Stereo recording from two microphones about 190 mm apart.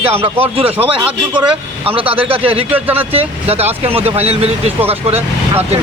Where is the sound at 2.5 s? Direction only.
30° right (ahead or behind).